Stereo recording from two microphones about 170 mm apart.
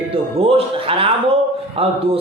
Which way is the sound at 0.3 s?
35° right (ahead or behind).